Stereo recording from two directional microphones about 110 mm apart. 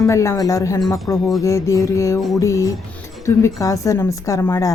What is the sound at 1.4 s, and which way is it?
Speech, 30° left (ahead or behind).